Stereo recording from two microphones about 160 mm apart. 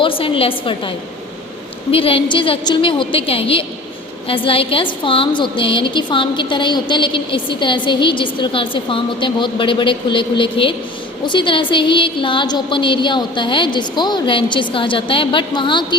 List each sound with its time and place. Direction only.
0.0 s a woman's voice: 35° left (ahead or behind)